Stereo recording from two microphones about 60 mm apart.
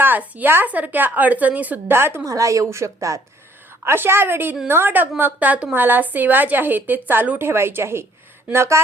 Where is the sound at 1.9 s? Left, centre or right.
Right.